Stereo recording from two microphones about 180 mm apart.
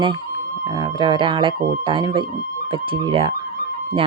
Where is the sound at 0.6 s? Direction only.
20° right (ahead or behind).